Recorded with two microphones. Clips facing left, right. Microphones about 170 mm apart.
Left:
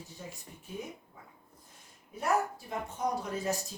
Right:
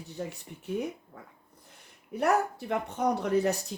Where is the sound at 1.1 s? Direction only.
65° right (ahead or behind).